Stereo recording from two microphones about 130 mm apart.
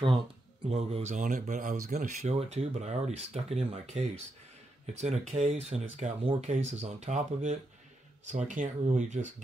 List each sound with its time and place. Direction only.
0.7 s speech: 55° right (ahead or behind)